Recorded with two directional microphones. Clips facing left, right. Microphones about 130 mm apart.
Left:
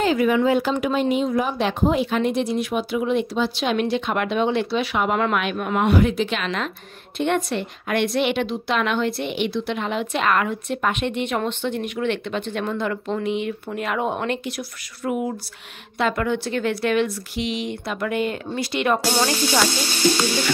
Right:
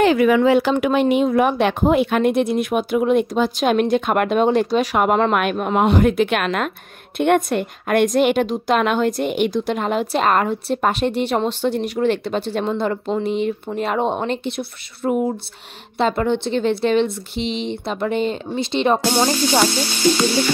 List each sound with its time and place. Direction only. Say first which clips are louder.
0.0 s speech: right 4 dB; 70° right (ahead or behind); by 18.9 s 25° right (ahead or behind)
19.0 s music: right 3 dB; 15° right (ahead or behind)